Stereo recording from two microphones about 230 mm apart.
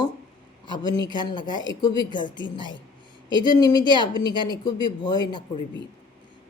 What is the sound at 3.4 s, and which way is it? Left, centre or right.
A man's voice, centre.